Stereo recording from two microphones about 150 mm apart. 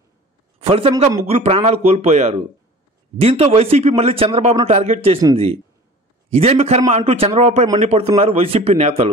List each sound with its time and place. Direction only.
0.6 s a man's voice: 40° right (ahead or behind)